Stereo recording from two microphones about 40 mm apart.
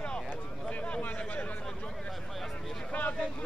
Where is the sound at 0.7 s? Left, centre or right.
Left.